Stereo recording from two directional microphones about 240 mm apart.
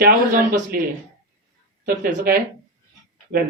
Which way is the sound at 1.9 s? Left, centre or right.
Right.